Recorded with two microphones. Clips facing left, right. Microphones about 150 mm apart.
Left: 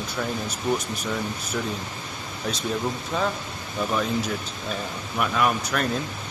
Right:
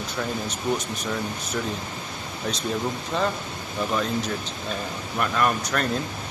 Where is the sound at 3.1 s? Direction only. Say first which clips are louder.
Right 2 dB; 5° left (ahead or behind).